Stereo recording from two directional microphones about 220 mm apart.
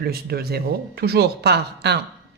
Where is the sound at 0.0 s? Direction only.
45° right (ahead or behind).